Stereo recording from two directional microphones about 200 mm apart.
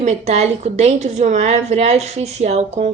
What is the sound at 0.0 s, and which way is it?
Speech, 35° right (ahead or behind).